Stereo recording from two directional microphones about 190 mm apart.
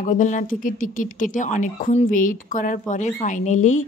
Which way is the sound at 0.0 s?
40° left (ahead or behind).